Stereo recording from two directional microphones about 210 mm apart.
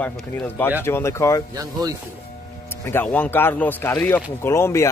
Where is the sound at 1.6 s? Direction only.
20° right (ahead or behind).